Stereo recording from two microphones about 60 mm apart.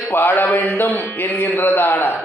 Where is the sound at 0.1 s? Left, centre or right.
Left.